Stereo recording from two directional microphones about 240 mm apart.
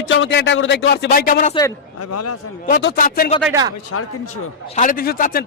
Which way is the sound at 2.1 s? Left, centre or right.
Left.